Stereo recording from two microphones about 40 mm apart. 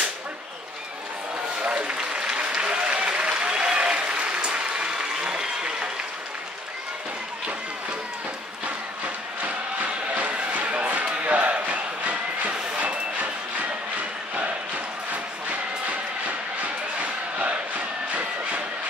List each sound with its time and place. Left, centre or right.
1.6 s applause: right
10.1 s a sound: right
12.7 s vehicle: right
15.9 s crowd: right